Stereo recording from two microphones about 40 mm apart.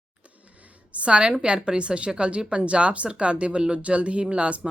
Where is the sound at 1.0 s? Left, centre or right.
Right.